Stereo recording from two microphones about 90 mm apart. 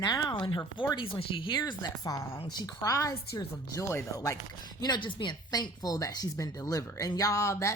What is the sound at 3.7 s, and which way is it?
Speech, 30° left (ahead or behind).